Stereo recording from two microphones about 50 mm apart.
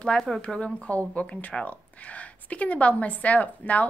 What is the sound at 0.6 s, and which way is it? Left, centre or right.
A woman's voice, left.